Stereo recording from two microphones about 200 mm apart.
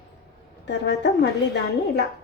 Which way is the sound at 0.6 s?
60° left (ahead or behind).